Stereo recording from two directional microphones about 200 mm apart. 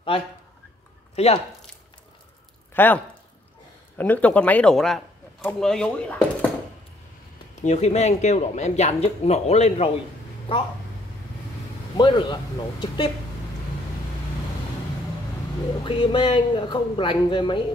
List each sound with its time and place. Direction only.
1.1 s speech: 30° left (ahead or behind)
2.7 s speech: 10° left (ahead or behind)
4.0 s speech: 5° left (ahead or behind)
7.5 s speech: 35° left (ahead or behind)
12.0 s speech: 25° left (ahead or behind)
15.8 s speech: 25° left (ahead or behind)